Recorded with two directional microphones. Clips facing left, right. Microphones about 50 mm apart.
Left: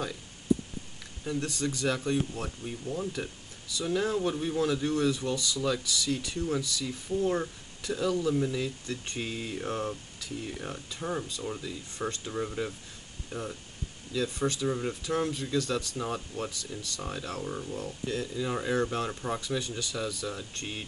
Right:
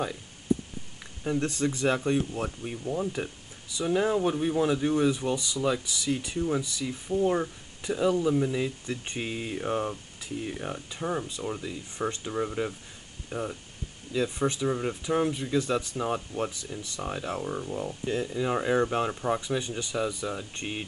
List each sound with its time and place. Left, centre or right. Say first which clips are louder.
1.2 s speech: right 4 dB; right